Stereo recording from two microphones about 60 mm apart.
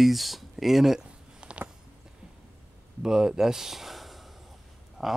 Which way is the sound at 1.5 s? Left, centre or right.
Centre.